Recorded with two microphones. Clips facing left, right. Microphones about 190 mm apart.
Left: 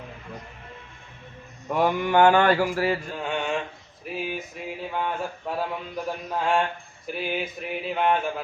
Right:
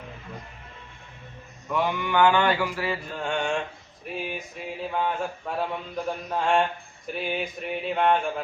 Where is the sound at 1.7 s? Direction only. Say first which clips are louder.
Left 4 dB; 45° left (ahead or behind).